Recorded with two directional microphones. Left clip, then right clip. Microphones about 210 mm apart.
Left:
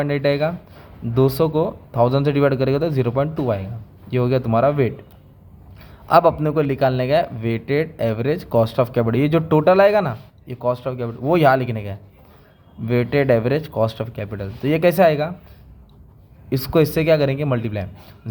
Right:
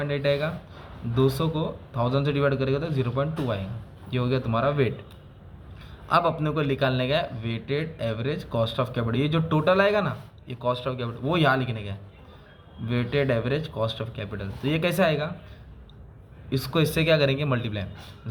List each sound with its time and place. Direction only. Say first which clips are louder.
0.0 s speech: left 6 dB; 45° left (ahead or behind)
16.5 s a man's voice: left 8 dB; 45° left (ahead or behind)